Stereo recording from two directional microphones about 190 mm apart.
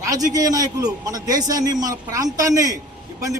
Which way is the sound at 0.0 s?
20° right (ahead or behind).